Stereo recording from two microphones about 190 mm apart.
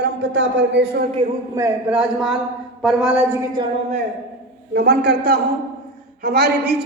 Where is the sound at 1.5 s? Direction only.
10° right (ahead or behind).